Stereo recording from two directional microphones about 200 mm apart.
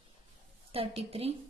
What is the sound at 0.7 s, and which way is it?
Speech, 30° right (ahead or behind).